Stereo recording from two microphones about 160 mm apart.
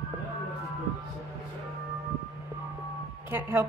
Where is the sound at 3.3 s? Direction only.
15° right (ahead or behind).